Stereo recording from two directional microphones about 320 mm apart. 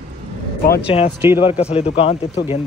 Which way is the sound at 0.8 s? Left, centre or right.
Centre.